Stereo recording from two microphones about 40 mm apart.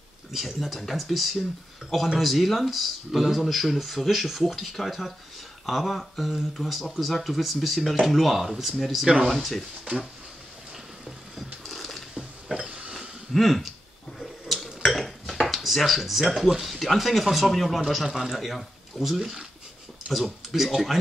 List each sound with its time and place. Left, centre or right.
0.3 s speech: centre
11.3 s a sound: centre
12.6 s pig: right
13.3 s speech: centre
14.5 s dishes: centre
16.6 s speech: centre
18.0 s speech: centre
18.3 s speech: centre